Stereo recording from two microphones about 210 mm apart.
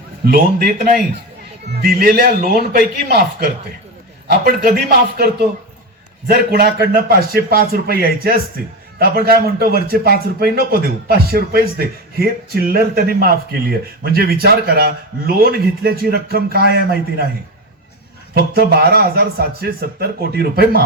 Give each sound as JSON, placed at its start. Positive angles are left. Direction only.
{"t": 0.3, "sound": "speech", "side_deg": -45}
{"t": 18.3, "sound": "speech", "side_deg": -50}